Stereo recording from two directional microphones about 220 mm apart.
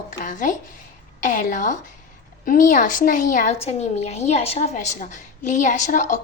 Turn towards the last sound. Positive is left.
turn(degrees=35)  # may be behind; listen again after turning